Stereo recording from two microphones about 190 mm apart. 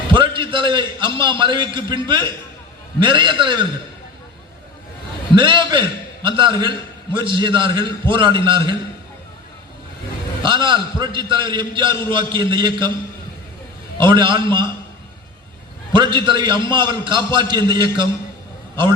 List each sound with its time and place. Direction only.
0.1 s a man's voice: 25° right (ahead or behind)
5.3 s a man's voice: 25° right (ahead or behind)
10.4 s a man's voice: 25° right (ahead or behind)
14.0 s a man's voice: 25° right (ahead or behind)
15.9 s a man's voice: 25° right (ahead or behind)